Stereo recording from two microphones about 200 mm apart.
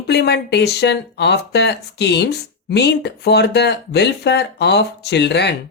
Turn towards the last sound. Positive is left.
turn(degrees=60)  # may be behind; listen again after turning